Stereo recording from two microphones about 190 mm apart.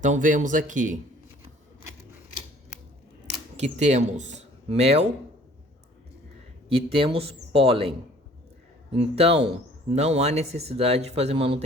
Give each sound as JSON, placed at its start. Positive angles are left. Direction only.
{"t": 0.0, "sound": "speech", "side_deg": -40}
{"t": 3.6, "sound": "speech", "side_deg": -40}
{"t": 6.7, "sound": "a man's voice", "side_deg": -30}